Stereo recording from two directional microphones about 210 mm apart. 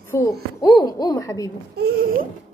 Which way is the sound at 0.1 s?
15° left (ahead or behind).